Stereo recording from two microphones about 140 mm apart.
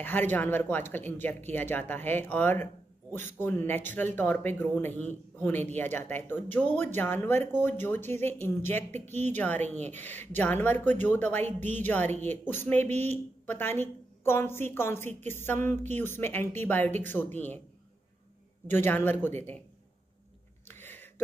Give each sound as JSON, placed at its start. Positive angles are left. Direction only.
{"t": 0.0, "sound": "speech", "side_deg": 15}
{"t": 18.7, "sound": "speech", "side_deg": 15}
{"t": 20.6, "sound": "a sound", "side_deg": 15}